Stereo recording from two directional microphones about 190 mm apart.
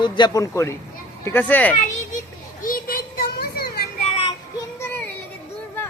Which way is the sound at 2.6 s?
50° left (ahead or behind).